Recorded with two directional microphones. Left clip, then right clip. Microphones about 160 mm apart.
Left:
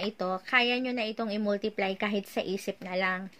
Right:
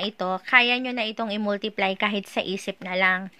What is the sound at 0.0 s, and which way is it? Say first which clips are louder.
A woman's voice: right 5 dB; 30° right (ahead or behind).